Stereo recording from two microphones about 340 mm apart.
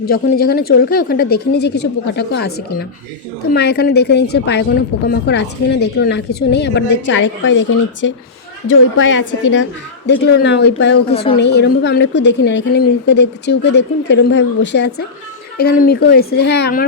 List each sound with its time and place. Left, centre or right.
0.0 s a woman's voice: left
3.5 s a woman's voice: left